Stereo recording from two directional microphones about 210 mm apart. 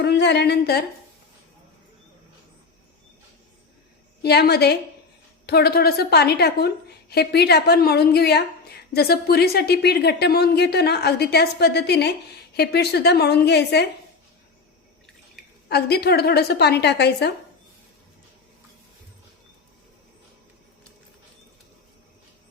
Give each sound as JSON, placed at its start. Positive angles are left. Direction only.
{"t": 0.0, "sound": "a woman's voice", "side_deg": 55}
{"t": 4.2, "sound": "a woman's voice", "side_deg": 50}
{"t": 15.7, "sound": "a woman's voice", "side_deg": 50}